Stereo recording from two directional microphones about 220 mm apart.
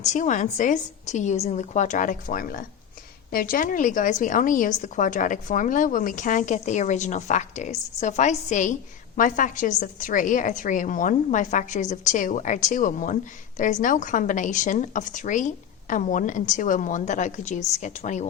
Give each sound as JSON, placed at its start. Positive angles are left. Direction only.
{"t": 0.0, "sound": "a woman's voice", "side_deg": 35}